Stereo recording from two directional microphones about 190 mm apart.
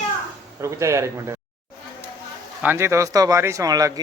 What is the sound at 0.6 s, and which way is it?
Speech, 15° right (ahead or behind).